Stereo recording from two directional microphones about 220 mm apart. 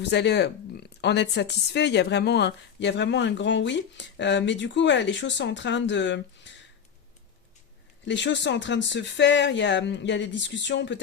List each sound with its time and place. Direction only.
0.0 s speech: 50° left (ahead or behind)
8.0 s speech: 55° left (ahead or behind)